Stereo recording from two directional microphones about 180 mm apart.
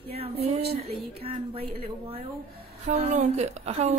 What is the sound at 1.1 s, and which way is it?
A woman's voice, 30° right (ahead or behind).